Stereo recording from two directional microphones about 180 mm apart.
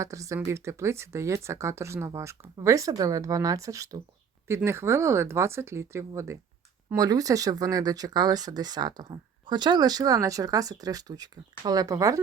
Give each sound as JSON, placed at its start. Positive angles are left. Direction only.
{"t": 0.0, "sound": "speech", "side_deg": -20}